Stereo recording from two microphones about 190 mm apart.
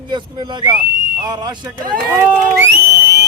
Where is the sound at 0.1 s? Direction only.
25° right (ahead or behind).